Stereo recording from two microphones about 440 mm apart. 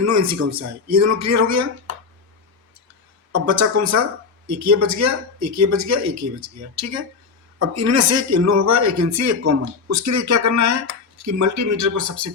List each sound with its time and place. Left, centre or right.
0.0 s speech: right
3.3 s speech: right